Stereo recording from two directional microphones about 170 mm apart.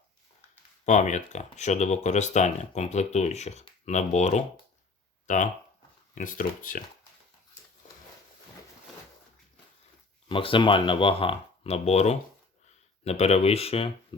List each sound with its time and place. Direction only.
0.9 s speech: 45° left (ahead or behind)
10.2 s speech: 30° left (ahead or behind)